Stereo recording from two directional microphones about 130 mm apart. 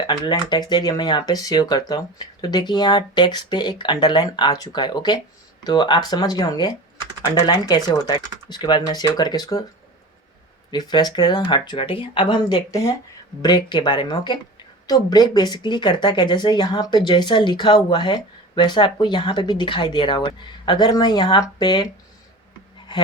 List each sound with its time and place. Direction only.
0.1 s speech: 35° left (ahead or behind)
10.7 s speech: 35° left (ahead or behind)